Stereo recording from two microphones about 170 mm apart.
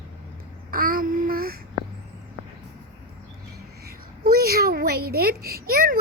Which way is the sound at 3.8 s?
65° right (ahead or behind).